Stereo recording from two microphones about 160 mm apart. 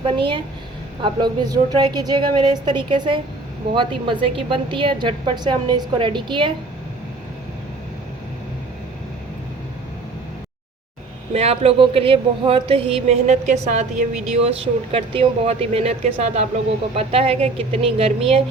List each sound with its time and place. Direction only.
0.0 s a woman's voice: 30° right (ahead or behind)
11.3 s speech: 40° right (ahead or behind)